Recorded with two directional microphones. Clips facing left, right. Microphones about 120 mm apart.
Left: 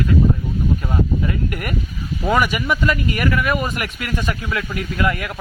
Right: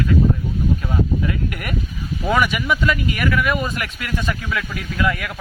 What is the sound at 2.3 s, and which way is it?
Speech, 5° left (ahead or behind).